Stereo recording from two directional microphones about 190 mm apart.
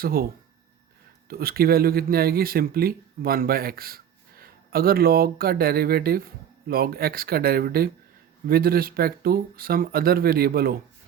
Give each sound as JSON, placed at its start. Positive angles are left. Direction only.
{"t": 0.0, "sound": "speech", "side_deg": -50}
{"t": 1.3, "sound": "speech", "side_deg": -50}